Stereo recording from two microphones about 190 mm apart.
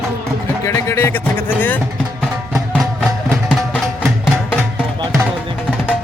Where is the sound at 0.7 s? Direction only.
15° left (ahead or behind).